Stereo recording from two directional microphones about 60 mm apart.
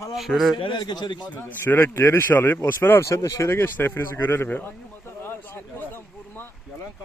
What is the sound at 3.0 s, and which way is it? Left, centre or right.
Speech, left.